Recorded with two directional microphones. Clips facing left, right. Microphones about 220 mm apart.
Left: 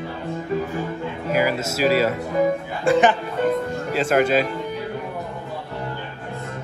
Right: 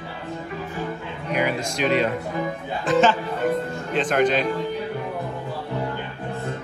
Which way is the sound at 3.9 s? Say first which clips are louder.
Left 2 dB; 5° left (ahead or behind).